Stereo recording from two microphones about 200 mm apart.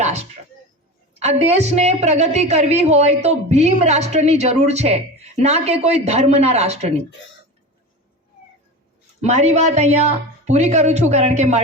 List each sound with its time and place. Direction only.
0.0 s a sound: 35° right (ahead or behind)
1.2 s a woman's voice: 30° right (ahead or behind)
9.2 s a woman's voice: 35° right (ahead or behind)